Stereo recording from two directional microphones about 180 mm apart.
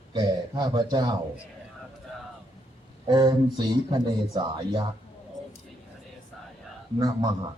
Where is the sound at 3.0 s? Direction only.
25° right (ahead or behind).